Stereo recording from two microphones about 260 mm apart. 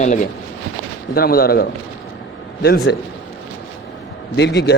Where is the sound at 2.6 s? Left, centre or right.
Left.